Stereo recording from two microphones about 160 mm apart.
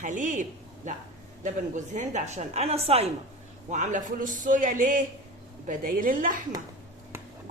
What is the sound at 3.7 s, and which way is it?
A woman's voice, 50° right (ahead or behind).